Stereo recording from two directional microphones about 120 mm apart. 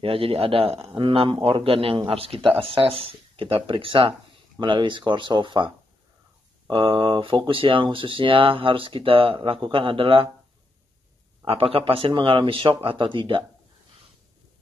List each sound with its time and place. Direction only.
0.0 s speech: 50° right (ahead or behind)
6.7 s speech: 40° right (ahead or behind)
11.4 s speech: 50° right (ahead or behind)